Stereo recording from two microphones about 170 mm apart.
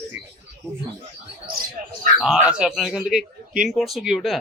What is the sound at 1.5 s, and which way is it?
Speech, 60° right (ahead or behind).